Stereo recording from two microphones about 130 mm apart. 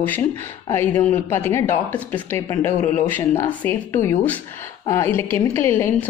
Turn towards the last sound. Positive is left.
turn(degrees=20)  # may be behind; listen again after turning